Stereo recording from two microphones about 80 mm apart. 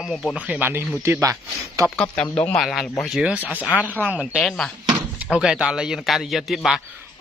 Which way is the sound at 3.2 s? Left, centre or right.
Centre.